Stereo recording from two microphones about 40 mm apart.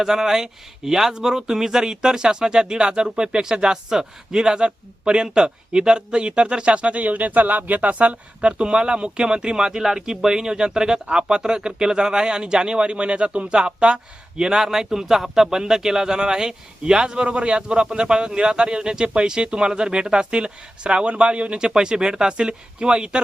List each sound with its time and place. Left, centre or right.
0.0 s speech: centre